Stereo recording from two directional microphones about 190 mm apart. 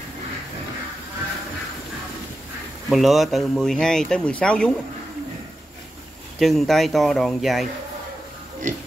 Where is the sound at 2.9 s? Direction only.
Centre (ahead or behind).